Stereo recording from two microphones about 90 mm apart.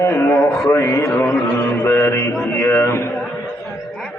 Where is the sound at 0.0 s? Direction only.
30° left (ahead or behind).